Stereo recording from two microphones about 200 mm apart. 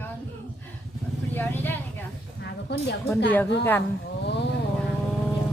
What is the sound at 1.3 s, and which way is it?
Vehicle, 10° left (ahead or behind).